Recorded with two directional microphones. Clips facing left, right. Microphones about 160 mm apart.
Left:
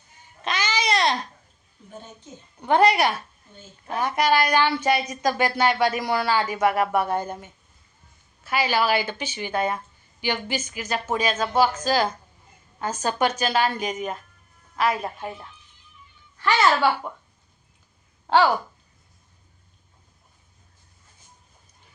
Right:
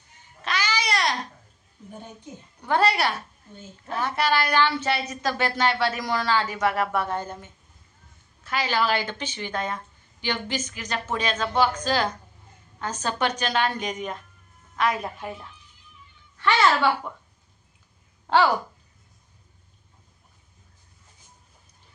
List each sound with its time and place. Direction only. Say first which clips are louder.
0.4 s babbling: left 2 dB; 20° left (ahead or behind)
2.6 s a woman's voice: left 4 dB; 20° left (ahead or behind); by 15.3 s centre (ahead or behind)
17.1 s a woman's voice: left 2 dB; 5° left (ahead or behind)